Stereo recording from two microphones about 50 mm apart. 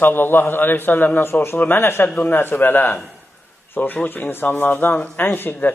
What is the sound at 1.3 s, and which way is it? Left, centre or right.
A man's voice, left.